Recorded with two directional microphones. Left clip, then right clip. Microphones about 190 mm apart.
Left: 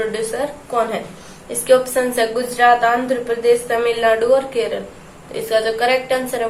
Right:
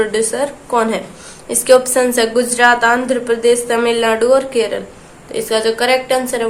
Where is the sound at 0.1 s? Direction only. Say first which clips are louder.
Right 5 dB; 50° right (ahead or behind).